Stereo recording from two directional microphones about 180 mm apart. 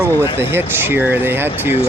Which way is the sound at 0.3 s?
10° right (ahead or behind).